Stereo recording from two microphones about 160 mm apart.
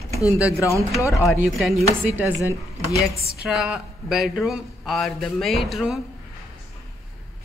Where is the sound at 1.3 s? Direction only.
5° right (ahead or behind).